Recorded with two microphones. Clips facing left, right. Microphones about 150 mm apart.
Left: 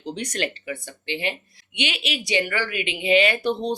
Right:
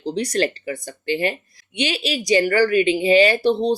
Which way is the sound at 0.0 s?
35° right (ahead or behind).